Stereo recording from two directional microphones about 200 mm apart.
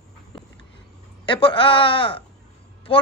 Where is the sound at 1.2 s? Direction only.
25° left (ahead or behind).